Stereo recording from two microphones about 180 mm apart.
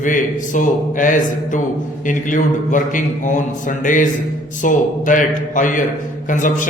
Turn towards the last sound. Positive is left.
turn(degrees=45)  # may be behind; listen again after turning